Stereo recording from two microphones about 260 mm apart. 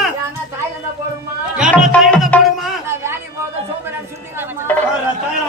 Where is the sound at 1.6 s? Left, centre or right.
Centre.